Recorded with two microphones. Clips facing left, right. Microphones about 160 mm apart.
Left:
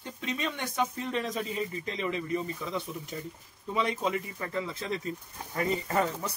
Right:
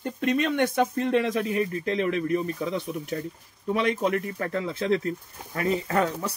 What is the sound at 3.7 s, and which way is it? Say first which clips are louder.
Speech: right 5 dB; 70° right (ahead or behind).